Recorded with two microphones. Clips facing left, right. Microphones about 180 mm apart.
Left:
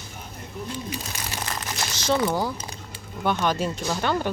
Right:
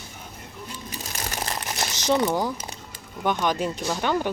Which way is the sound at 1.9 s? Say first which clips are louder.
Right 1 dB; 15° right (ahead or behind).